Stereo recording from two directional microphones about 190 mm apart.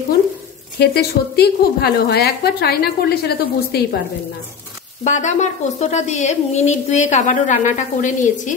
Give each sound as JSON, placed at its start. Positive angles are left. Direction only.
{"t": 0.7, "sound": "a woman's voice", "side_deg": 60}
{"t": 5.0, "sound": "speech", "side_deg": 40}